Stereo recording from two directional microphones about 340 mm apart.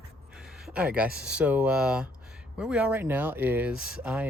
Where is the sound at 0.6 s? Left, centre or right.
Centre.